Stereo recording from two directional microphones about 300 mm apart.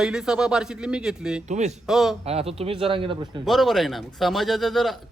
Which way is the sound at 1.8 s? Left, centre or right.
Centre.